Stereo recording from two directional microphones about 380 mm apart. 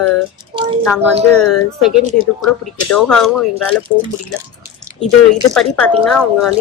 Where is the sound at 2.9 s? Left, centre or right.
Centre.